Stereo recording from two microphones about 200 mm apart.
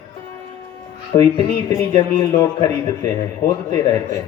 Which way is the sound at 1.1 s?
30° left (ahead or behind).